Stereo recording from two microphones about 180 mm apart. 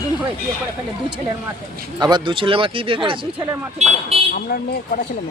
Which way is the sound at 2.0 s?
25° right (ahead or behind).